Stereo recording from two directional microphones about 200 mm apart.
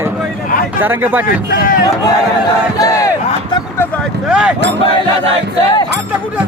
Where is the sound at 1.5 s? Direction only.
45° left (ahead or behind).